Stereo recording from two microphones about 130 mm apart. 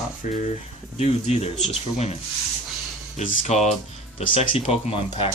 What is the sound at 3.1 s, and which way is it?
Speech, 75° left (ahead or behind).